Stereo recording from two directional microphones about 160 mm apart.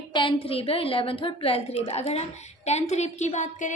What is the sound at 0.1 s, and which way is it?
A woman's voice, 30° left (ahead or behind).